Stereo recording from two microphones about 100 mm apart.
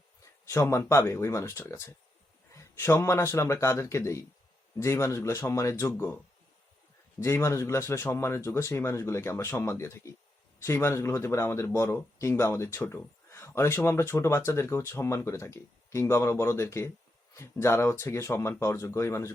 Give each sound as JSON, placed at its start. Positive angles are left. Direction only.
{"t": 0.4, "sound": "speech", "side_deg": 30}
{"t": 7.2, "sound": "speech", "side_deg": 30}